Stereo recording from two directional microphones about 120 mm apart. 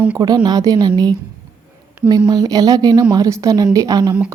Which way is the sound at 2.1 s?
35° right (ahead or behind).